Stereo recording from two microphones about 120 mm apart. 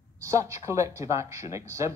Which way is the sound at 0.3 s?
25° right (ahead or behind).